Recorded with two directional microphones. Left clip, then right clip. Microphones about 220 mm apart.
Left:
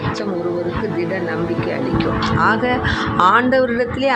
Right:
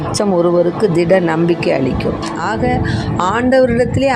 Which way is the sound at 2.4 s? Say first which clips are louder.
Left 1 dB; 15° right (ahead or behind).